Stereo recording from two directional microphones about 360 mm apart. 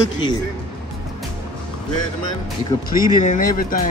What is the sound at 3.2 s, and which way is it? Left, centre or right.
Speech, left.